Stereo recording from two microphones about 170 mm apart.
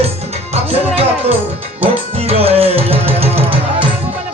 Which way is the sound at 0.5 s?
35° right (ahead or behind).